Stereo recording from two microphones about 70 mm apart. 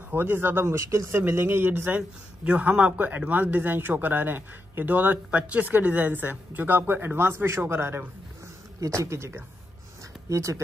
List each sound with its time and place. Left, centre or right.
0.1 s speech: right
0.7 s speech: right
2.0 s speech: centre; by 8.0 s right
8.8 s speech: right